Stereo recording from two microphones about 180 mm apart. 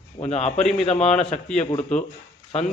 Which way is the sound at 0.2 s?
35° left (ahead or behind).